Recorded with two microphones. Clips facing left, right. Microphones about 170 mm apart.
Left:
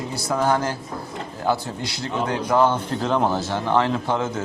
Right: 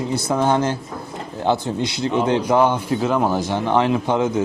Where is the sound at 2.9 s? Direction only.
5° right (ahead or behind).